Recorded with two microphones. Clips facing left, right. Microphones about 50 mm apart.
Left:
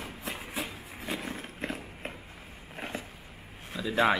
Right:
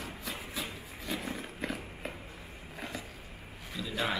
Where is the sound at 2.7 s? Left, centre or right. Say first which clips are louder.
Left 3 dB; left.